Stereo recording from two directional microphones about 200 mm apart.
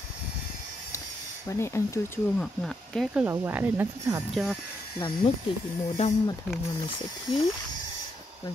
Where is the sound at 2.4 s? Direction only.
Centre (ahead or behind).